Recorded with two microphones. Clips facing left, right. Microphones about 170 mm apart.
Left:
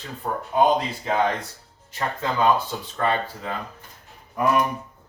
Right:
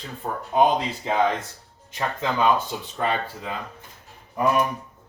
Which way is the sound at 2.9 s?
15° right (ahead or behind).